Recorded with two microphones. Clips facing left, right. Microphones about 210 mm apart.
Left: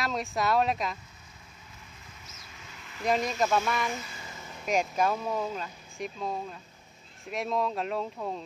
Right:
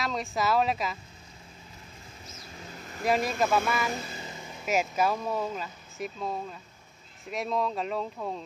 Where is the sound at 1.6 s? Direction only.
30° right (ahead or behind).